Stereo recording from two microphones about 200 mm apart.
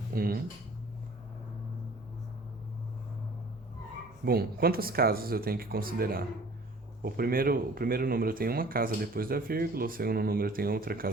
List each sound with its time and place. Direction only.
0.1 s speech: 45° right (ahead or behind)
4.3 s speech: 50° right (ahead or behind)